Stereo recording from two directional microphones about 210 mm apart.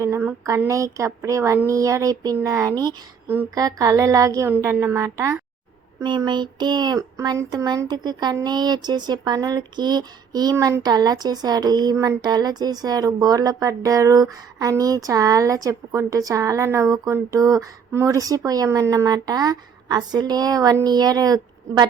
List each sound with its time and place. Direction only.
0.0 s speech: 10° right (ahead or behind)